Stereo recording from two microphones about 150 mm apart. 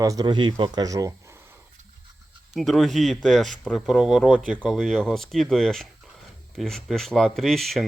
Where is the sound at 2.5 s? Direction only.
Centre (ahead or behind).